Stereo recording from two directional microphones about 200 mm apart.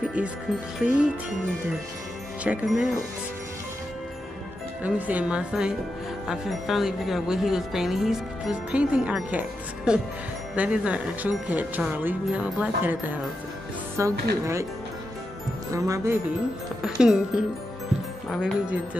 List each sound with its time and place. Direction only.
0.8 s speech: 5° right (ahead or behind)
2.4 s speech: 5° right (ahead or behind)
4.8 s speech: 10° right (ahead or behind)
15.7 s speech: 15° right (ahead or behind)
16.8 s speech: 5° right (ahead or behind)